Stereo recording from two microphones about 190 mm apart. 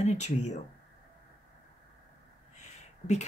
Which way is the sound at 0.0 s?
35° left (ahead or behind).